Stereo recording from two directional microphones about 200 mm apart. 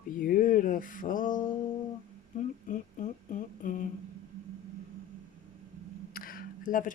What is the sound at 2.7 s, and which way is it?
Speech, 40° left (ahead or behind).